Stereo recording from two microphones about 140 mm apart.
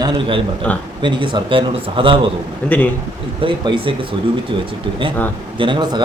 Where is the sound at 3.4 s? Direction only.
35° right (ahead or behind).